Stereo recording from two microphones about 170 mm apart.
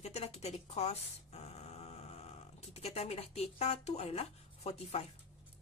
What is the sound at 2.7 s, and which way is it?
Speech, 35° left (ahead or behind).